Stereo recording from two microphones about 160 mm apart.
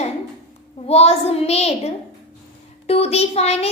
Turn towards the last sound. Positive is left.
turn(degrees=40)  # may be behind; listen again after turning